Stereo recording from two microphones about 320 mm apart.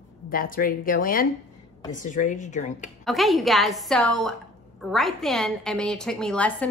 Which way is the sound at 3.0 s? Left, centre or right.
Centre.